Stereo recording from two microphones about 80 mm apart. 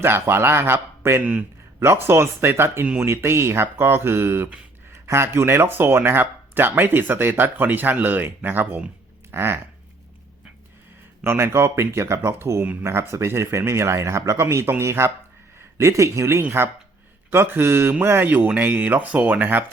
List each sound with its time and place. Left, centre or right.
0.0 s speech: right
1.2 s a man's voice: centre
1.8 s speech: right
11.2 s speech: right